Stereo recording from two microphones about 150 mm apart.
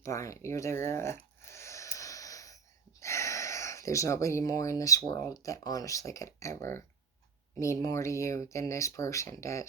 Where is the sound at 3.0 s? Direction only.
20° left (ahead or behind).